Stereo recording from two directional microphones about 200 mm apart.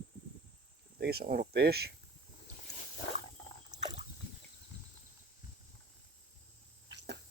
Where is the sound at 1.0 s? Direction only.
50° right (ahead or behind).